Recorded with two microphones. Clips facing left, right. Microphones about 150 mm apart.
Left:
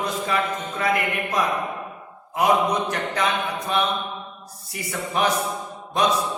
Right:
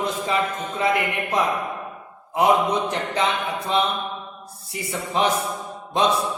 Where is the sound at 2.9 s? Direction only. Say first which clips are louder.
Right 1 dB; 20° right (ahead or behind).